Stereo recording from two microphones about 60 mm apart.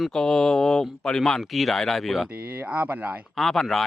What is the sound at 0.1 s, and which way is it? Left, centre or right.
Speech, centre.